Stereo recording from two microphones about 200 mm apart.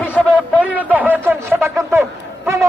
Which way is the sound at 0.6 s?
10° right (ahead or behind).